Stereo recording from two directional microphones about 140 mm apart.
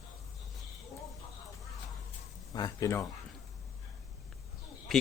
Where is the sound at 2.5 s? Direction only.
25° left (ahead or behind).